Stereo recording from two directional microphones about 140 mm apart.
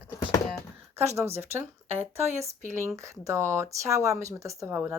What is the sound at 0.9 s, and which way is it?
Speech, 20° right (ahead or behind).